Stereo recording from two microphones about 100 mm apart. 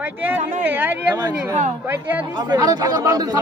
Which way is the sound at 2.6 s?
40° right (ahead or behind).